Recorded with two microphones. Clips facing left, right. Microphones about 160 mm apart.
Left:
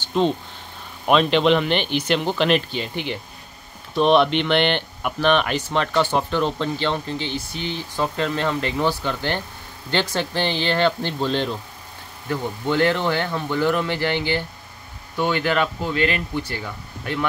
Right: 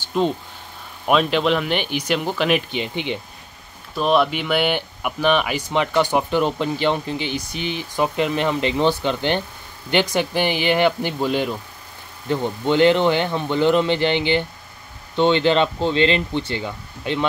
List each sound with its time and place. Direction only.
0.0 s a sound: 10° right (ahead or behind)
1.0 s speech: 5° right (ahead or behind)
3.9 s speech: centre (ahead or behind); by 17.2 s 20° right (ahead or behind)